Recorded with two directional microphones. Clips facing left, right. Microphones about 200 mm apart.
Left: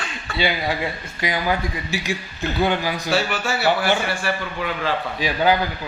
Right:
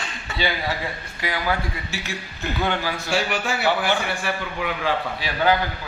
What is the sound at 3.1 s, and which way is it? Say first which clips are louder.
Speech: left 2 dB; 15° right (ahead or behind).